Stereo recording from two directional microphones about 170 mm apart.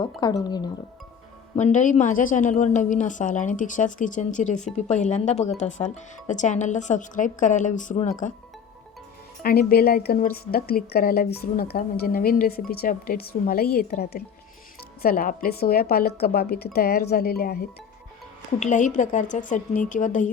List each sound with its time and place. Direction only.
0.0 s speech: 25° left (ahead or behind)
1.5 s a woman's voice: 45° left (ahead or behind)
9.4 s a woman's voice: 60° left (ahead or behind)
18.6 s a woman's voice: 45° left (ahead or behind)